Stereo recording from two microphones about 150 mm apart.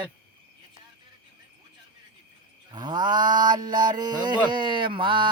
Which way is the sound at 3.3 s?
60° right (ahead or behind).